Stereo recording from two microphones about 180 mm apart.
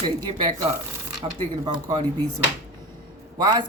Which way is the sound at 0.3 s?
25° right (ahead or behind).